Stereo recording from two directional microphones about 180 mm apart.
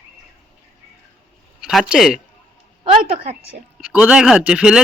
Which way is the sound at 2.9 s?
35° right (ahead or behind).